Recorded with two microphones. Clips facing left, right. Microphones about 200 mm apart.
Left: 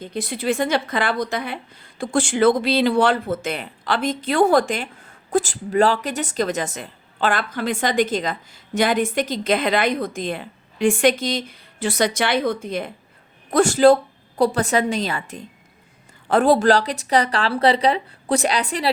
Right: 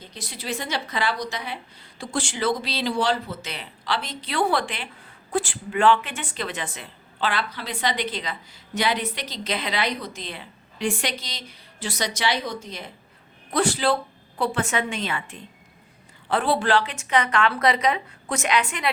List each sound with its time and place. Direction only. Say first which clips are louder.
0.0 s a woman's voice: left 11 dB; 55° left (ahead or behind); by 18.9 s 35° left (ahead or behind)